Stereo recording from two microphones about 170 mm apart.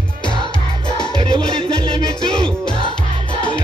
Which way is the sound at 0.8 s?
25° left (ahead or behind).